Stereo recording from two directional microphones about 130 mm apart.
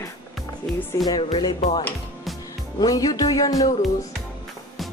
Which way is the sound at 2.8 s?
30° left (ahead or behind).